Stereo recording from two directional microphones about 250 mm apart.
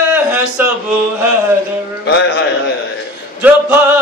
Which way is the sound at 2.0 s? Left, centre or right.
Left.